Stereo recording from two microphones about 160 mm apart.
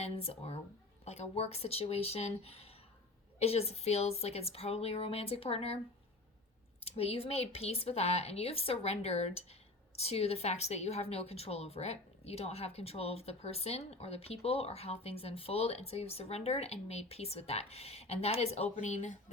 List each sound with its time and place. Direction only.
0.0 s speech: 40° left (ahead or behind)
6.8 s speech: 40° left (ahead or behind)